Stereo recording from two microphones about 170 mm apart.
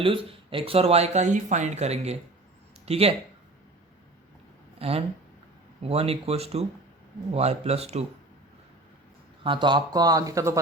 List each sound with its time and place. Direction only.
0.0 s speech: 30° right (ahead or behind)
4.8 s speech: 35° right (ahead or behind)
9.4 s speech: 30° right (ahead or behind)